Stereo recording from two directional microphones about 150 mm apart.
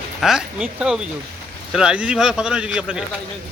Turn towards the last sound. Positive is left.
turn(degrees=-5)  # may be behind; listen again after turning